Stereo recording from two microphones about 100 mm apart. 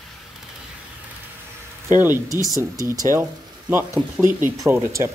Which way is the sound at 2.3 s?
35° left (ahead or behind).